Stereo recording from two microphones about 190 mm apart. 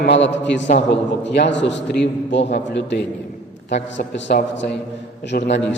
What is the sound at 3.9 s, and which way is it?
Speech, 60° left (ahead or behind).